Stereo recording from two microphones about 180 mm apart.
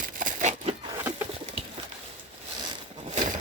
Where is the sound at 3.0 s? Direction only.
40° right (ahead or behind).